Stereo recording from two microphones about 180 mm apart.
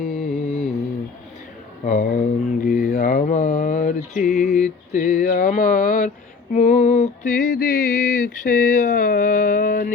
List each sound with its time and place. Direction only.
0.0 s music: 45° left (ahead or behind)
1.8 s mantra: 45° left (ahead or behind)
6.5 s a sound: 40° left (ahead or behind)